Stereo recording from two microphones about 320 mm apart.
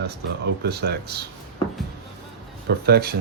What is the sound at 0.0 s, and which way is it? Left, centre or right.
Speech, right.